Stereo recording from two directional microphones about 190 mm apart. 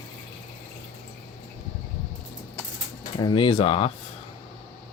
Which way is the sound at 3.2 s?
25° left (ahead or behind).